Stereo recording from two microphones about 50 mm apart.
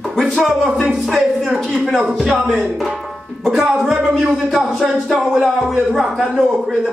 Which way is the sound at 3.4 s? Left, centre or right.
Centre.